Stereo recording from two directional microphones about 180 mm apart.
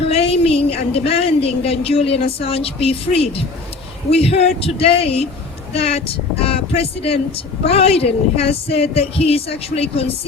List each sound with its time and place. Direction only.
0.1 s a woman's voice: 35° left (ahead or behind)